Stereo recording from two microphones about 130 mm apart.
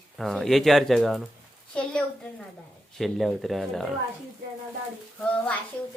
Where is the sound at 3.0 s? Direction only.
Centre (ahead or behind).